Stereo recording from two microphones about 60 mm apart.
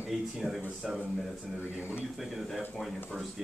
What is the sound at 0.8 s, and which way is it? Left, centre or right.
Speech, centre.